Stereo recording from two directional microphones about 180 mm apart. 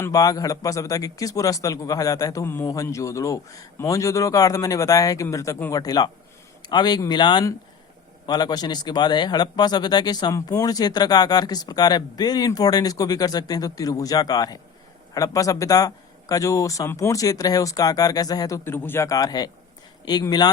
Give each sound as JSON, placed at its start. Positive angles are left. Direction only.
{"t": 0.0, "sound": "speech", "side_deg": 20}